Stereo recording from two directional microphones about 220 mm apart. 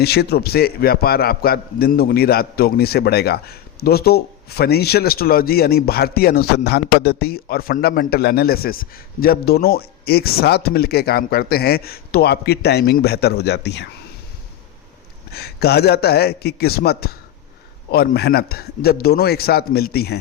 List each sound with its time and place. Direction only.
0.0 s a man's voice: 45° left (ahead or behind)
15.3 s a man's voice: 45° left (ahead or behind)